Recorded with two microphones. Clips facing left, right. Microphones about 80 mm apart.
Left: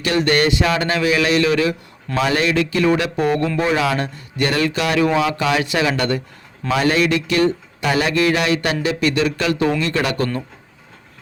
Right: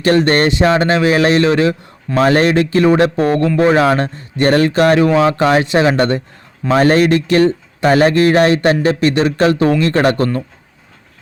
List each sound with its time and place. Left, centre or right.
0.0 s speech: right